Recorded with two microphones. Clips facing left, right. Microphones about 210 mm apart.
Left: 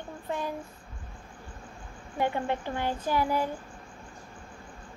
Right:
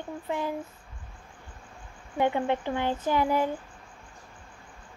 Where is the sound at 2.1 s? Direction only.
20° right (ahead or behind).